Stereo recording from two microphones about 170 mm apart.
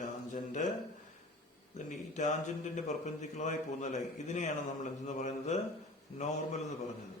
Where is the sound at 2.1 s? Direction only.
45° left (ahead or behind).